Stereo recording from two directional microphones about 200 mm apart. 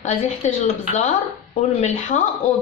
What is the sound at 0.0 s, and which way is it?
Speech, 35° left (ahead or behind).